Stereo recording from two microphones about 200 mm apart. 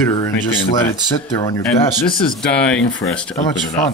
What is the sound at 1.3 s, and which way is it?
Speech, 25° left (ahead or behind).